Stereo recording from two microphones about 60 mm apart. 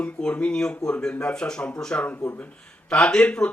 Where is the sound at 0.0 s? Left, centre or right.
Centre.